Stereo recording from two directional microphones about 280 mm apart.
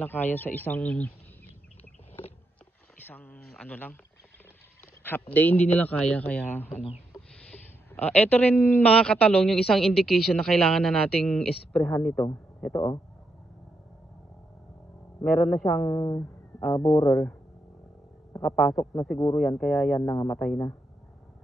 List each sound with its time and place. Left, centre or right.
0.0 s speech: centre
3.1 s a woman's voice: centre
5.0 s a woman's voice: centre
15.2 s a woman's voice: centre